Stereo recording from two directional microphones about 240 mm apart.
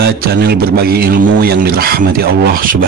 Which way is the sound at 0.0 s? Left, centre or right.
Right.